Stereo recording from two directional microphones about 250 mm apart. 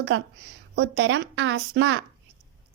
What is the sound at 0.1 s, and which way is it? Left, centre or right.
A woman's voice, right.